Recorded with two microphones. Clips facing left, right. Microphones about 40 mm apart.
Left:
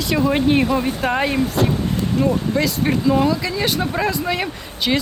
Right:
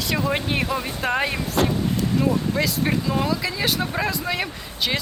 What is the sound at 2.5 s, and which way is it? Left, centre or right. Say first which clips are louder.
Speech: left 3 dB; centre.